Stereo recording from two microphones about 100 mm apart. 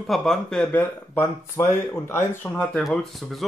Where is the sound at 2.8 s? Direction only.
Centre (ahead or behind).